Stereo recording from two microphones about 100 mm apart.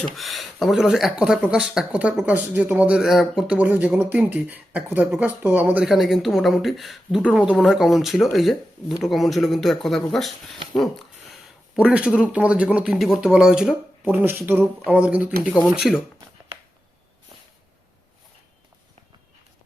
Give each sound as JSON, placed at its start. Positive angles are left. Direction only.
{"t": 0.0, "sound": "speech", "side_deg": 0}
{"t": 5.9, "sound": "speech", "side_deg": 0}
{"t": 10.8, "sound": "a sound", "side_deg": 0}
{"t": 11.8, "sound": "speech", "side_deg": -10}